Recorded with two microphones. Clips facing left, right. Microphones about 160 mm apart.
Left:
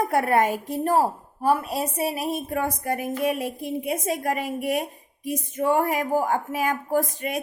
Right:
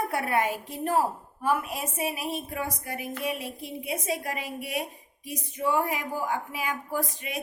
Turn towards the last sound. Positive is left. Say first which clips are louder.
# left 7 dB
turn(degrees=50)  # may be behind; listen again after turning